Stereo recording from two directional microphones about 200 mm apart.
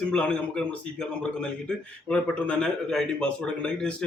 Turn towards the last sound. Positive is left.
turn(degrees=5)  # may be behind; listen again after turning